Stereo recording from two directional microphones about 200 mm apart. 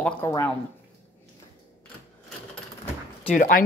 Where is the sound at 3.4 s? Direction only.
45° left (ahead or behind).